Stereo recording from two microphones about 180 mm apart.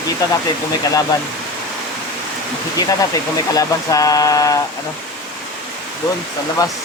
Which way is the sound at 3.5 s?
20° left (ahead or behind).